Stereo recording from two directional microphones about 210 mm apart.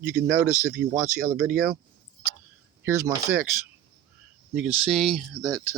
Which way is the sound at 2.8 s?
10° right (ahead or behind).